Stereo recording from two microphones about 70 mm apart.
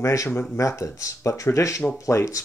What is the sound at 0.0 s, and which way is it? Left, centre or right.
Speech, left.